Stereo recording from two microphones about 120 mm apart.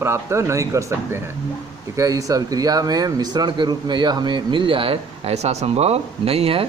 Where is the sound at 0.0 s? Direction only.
20° right (ahead or behind).